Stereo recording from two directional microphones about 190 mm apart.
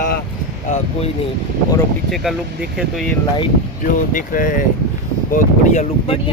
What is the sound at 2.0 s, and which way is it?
Speech, centre (ahead or behind).